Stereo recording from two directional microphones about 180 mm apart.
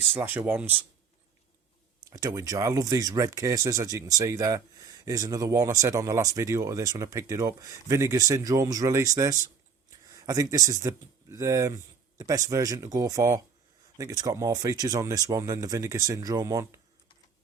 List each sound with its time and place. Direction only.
0.1 s speech: 10° right (ahead or behind)
2.0 s speech: 20° right (ahead or behind)